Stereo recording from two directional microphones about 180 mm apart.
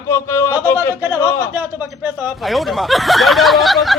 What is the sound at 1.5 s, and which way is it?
Speech, 10° right (ahead or behind).